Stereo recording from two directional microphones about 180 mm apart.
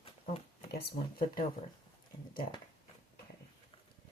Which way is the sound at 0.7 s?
60° left (ahead or behind).